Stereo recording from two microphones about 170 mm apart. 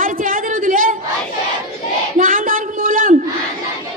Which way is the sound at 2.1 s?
55° right (ahead or behind).